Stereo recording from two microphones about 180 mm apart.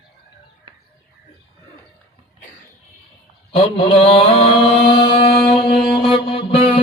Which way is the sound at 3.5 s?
30° left (ahead or behind).